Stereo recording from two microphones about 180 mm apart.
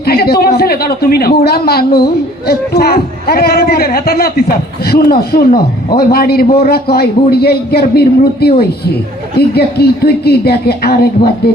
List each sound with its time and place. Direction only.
0.0 s speech: 60° left (ahead or behind)